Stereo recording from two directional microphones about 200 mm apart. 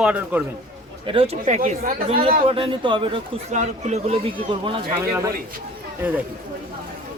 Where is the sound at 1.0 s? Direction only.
30° right (ahead or behind).